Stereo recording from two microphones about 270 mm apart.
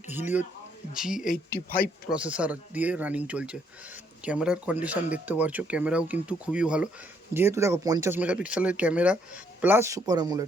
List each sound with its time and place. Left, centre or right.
0.1 s speech: centre
1.3 s speech: left
2.0 s speech: centre